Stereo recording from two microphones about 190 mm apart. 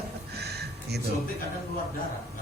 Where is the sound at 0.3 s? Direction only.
60° right (ahead or behind).